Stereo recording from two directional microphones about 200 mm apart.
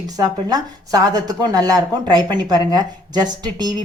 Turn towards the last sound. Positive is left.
turn(degrees=-20)  # may be behind; listen again after turning